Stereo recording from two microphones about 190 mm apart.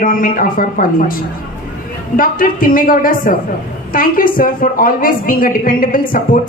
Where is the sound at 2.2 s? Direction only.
45° left (ahead or behind).